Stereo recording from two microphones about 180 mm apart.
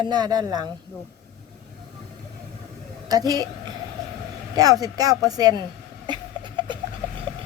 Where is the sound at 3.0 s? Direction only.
20° right (ahead or behind).